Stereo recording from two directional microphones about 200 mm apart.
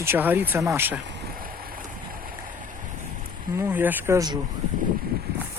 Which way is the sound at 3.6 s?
10° right (ahead or behind).